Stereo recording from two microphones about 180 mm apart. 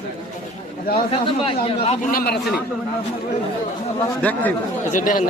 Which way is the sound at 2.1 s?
55° left (ahead or behind).